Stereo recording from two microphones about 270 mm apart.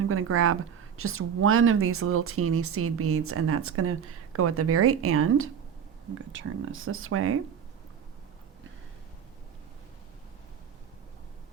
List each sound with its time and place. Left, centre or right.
0.0 s speech: right